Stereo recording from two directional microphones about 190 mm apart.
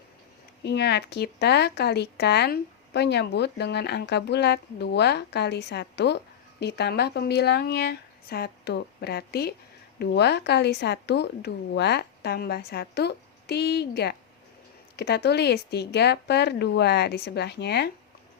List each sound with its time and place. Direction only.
0.6 s speech: 60° left (ahead or behind)